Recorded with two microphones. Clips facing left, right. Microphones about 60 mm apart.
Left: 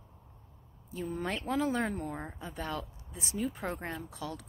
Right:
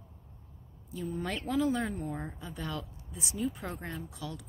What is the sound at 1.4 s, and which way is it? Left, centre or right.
Speech, left.